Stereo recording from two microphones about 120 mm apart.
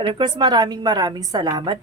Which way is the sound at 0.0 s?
45° right (ahead or behind).